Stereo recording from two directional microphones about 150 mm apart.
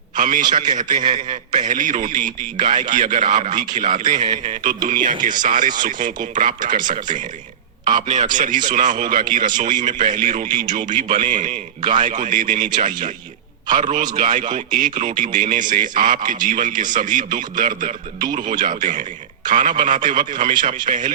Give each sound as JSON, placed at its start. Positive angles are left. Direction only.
{"t": 0.2, "sound": "a man's voice", "side_deg": -65}
{"t": 0.4, "sound": "a man's voice", "side_deg": -30}
{"t": 1.6, "sound": "a man's voice", "side_deg": -60}
{"t": 3.2, "sound": "a man's voice", "side_deg": -30}
{"t": 4.3, "sound": "a man's voice", "side_deg": -60}
{"t": 10.5, "sound": "speech", "side_deg": -30}
{"t": 10.8, "sound": "a man's voice", "side_deg": -60}
{"t": 20.3, "sound": "speech", "side_deg": -30}
{"t": 20.9, "sound": "a man's voice", "side_deg": -55}